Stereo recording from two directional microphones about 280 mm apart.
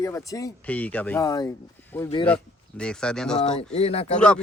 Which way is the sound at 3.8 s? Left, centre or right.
Left.